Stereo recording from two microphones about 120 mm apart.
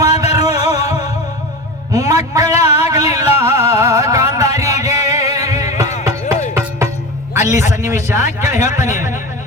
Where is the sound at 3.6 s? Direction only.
30° right (ahead or behind).